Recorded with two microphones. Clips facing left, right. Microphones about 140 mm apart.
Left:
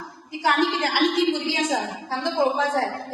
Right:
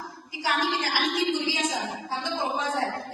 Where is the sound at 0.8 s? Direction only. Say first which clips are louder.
Left 6 dB; 65° left (ahead or behind).